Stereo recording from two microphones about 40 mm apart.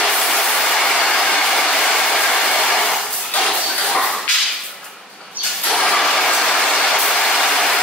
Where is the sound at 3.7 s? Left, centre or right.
Centre.